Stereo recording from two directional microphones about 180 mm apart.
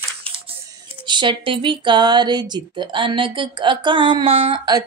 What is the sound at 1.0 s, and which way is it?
Speech, 25° right (ahead or behind).